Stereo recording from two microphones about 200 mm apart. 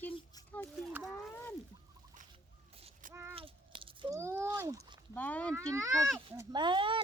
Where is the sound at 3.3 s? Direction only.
25° right (ahead or behind).